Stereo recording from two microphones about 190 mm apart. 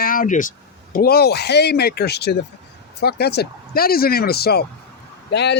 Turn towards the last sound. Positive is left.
turn(degrees=65)  # may be behind; listen again after turning